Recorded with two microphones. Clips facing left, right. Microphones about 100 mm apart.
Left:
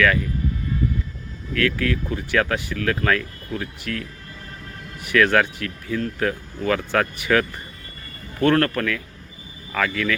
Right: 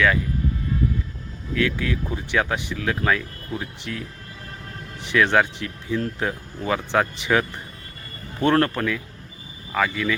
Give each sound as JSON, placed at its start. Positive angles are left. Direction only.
{"t": 1.5, "sound": "speech", "side_deg": -15}